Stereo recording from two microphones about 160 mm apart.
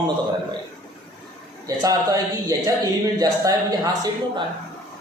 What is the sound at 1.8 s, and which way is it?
A man's voice, 20° right (ahead or behind).